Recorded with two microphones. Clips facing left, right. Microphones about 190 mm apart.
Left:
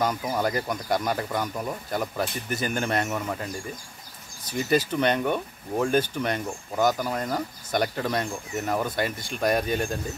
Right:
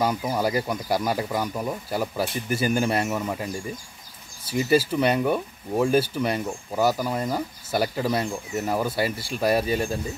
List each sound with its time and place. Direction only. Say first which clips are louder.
0.0 s speech: right 2 dB; 10° right (ahead or behind)
4.5 s speech: right 3 dB; 5° right (ahead or behind)